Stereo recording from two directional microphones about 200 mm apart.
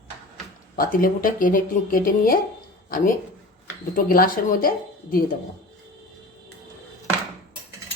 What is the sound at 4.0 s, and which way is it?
Speech, 45° left (ahead or behind).